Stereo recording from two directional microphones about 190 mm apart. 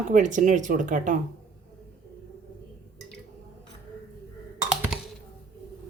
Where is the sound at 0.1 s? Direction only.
40° right (ahead or behind).